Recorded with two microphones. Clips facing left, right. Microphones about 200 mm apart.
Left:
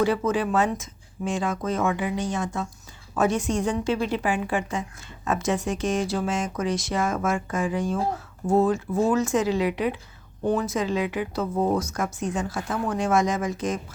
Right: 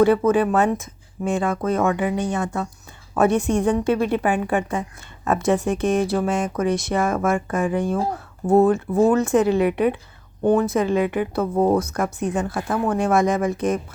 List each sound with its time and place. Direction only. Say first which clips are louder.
0.0 s a woman's voice: right 7 dB; 55° right (ahead or behind)